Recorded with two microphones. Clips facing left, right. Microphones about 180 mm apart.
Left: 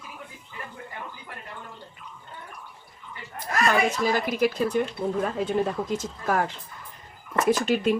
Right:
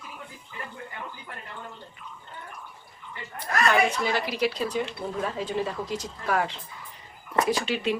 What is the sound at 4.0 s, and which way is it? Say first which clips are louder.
Speech: left 3 dB; 45° left (ahead or behind).